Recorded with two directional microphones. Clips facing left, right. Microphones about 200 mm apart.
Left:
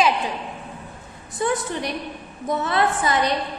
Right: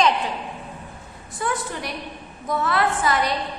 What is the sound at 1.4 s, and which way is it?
A woman's voice, 20° left (ahead or behind).